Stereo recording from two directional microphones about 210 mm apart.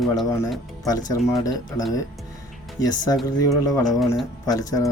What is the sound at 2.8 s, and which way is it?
Speech, 15° left (ahead or behind).